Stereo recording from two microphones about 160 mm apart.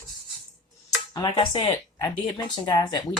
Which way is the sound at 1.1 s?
30° left (ahead or behind).